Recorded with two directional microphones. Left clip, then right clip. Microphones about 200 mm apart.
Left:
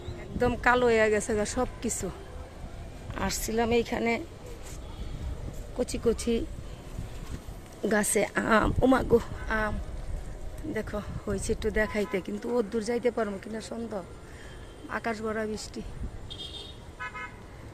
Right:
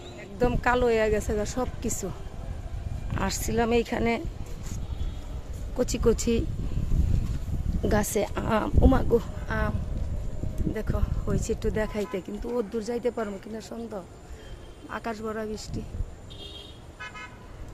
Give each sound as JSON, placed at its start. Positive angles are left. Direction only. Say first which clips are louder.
{"t": 0.3, "sound": "speech", "louder": "even", "side_deg": -5}
{"t": 3.2, "sound": "speech", "louder": "right 2 dB", "side_deg": -10}
{"t": 5.7, "sound": "speech", "louder": "right 3 dB", "side_deg": -25}
{"t": 7.8, "sound": "speech", "louder": "even", "side_deg": 0}
{"t": 10.8, "sound": "speech", "louder": "even", "side_deg": 0}